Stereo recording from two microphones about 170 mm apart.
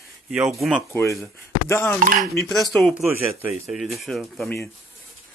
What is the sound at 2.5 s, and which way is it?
Speech, centre (ahead or behind).